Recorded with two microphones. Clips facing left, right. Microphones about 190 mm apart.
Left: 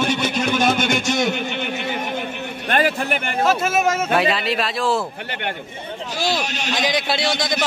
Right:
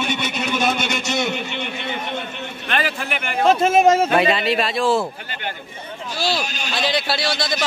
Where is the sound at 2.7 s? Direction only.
45° left (ahead or behind).